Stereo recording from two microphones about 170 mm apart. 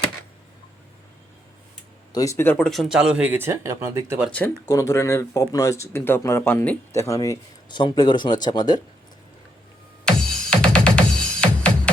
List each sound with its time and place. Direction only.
2.1 s speech: 20° left (ahead or behind); by 4.3 s 15° right (ahead or behind)
4.3 s speech: 10° left (ahead or behind)
4.7 s speech: 20° left (ahead or behind)
10.1 s music: 5° left (ahead or behind)